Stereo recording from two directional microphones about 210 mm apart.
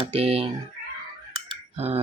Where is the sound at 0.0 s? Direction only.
30° right (ahead or behind).